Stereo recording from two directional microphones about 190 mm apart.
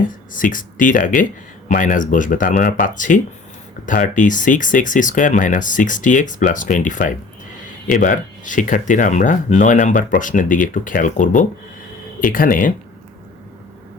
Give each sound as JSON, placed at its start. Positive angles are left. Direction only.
{"t": 0.3, "sound": "speech", "side_deg": 45}